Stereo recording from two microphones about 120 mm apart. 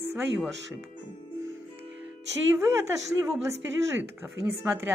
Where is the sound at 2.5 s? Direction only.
25° right (ahead or behind).